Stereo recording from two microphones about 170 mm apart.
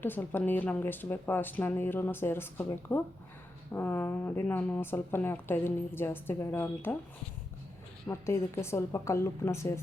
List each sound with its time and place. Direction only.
0.0 s speech: 10° left (ahead or behind)
8.0 s speech: 15° left (ahead or behind)